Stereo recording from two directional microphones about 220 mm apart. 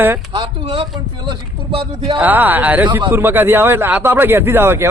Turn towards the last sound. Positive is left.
turn(degrees=-10)  # may be behind; listen again after turning